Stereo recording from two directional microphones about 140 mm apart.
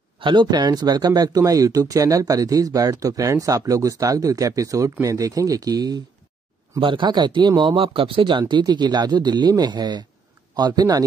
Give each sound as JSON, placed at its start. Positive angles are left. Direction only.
{"t": 0.2, "sound": "speech", "side_deg": -35}